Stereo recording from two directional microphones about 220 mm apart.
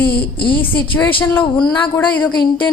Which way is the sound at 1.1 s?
25° left (ahead or behind).